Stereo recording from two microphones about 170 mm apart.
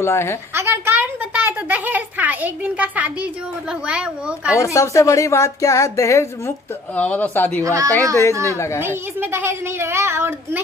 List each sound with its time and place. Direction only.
0.0 s a woman's voice: 15° left (ahead or behind)
0.6 s a child's voice: 15° right (ahead or behind)
4.6 s a woman's voice: 20° left (ahead or behind)
7.6 s a woman's voice: 20° right (ahead or behind)
8.5 s a woman's voice: 15° left (ahead or behind)
8.8 s a child's voice: 15° right (ahead or behind)